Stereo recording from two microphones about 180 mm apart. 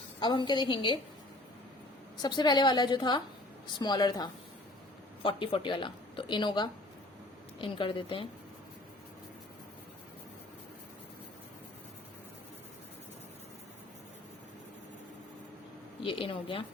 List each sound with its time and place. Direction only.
0.2 s a woman's voice: 25° left (ahead or behind)
2.2 s a woman's voice: 25° left (ahead or behind)
16.0 s a woman's voice: 30° left (ahead or behind)